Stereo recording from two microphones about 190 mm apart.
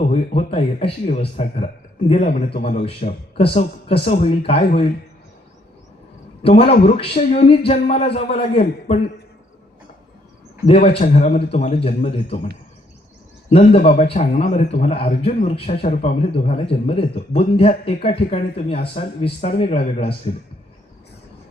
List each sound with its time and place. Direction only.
0.1 s a man's voice: 30° left (ahead or behind)
6.4 s a man's voice: 30° left (ahead or behind)
10.7 s a man's voice: 30° left (ahead or behind)
13.5 s a man's voice: 30° left (ahead or behind)